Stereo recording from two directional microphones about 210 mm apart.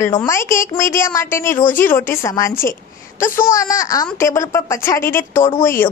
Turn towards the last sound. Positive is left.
turn(degrees=10)  # may be behind; listen again after turning